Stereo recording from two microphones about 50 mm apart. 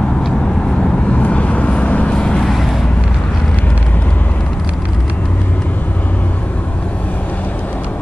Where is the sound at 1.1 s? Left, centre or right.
Left.